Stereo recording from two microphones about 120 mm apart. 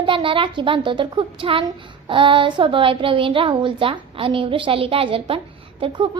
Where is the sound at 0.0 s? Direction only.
45° right (ahead or behind).